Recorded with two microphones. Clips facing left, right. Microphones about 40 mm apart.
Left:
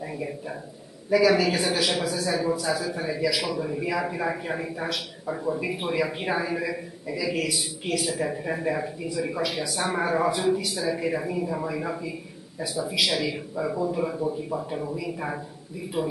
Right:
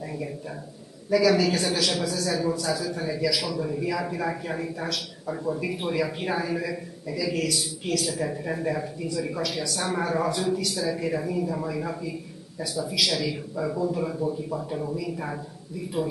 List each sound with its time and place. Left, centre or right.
1.1 s a man's voice: centre